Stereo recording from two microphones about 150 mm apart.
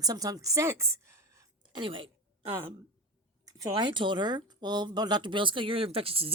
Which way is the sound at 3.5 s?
25° right (ahead or behind).